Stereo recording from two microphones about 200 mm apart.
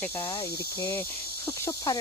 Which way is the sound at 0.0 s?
10° left (ahead or behind).